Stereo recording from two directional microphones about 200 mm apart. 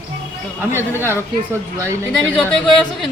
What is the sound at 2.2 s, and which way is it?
Speech, 5° left (ahead or behind).